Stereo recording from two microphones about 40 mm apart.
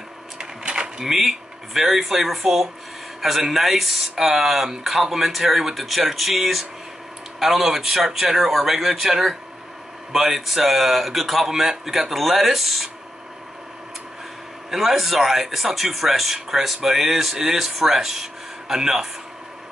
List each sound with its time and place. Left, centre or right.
0.7 s a sound: centre
1.1 s a man's voice: centre
14.7 s speech: centre